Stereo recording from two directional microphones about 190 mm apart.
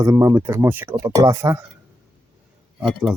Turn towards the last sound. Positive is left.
turn(degrees=0)  # may be behind; listen again after turning